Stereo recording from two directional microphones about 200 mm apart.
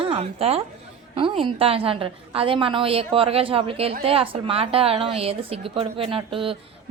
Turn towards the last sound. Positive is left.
turn(degrees=-25)  # may be behind; listen again after turning